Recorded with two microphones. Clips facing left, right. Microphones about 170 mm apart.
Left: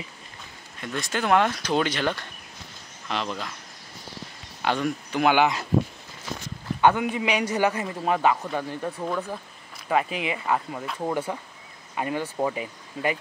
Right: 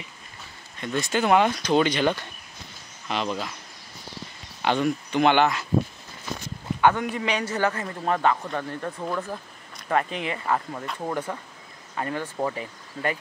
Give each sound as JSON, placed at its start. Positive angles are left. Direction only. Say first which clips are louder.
{"t": 0.7, "sound": "speech", "louder": "right 4 dB", "side_deg": 0}
{"t": 4.6, "sound": "speech", "louder": "right 2 dB", "side_deg": 0}
{"t": 6.8, "sound": "a man's voice", "louder": "left 1 dB", "side_deg": 10}